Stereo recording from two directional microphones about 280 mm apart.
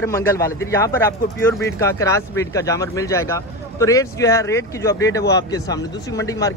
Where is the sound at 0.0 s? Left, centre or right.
Centre.